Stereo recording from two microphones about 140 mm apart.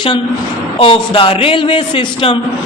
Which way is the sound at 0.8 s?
40° left (ahead or behind).